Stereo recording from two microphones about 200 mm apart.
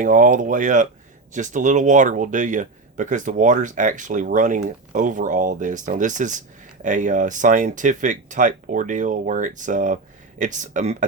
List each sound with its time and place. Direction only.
0.0 s speech: 40° right (ahead or behind)